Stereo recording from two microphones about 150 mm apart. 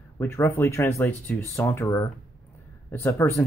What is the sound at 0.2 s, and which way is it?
Speech, 15° left (ahead or behind).